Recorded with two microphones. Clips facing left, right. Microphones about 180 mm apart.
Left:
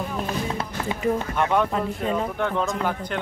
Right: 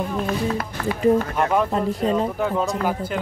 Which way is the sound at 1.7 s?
35° right (ahead or behind).